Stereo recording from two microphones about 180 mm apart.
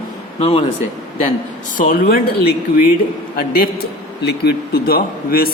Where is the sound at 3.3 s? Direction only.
60° left (ahead or behind).